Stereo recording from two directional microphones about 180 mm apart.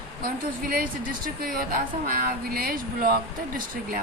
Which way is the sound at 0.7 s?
50° right (ahead or behind).